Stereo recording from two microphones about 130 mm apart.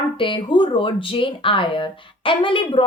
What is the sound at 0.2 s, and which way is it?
A woman's voice, 40° left (ahead or behind).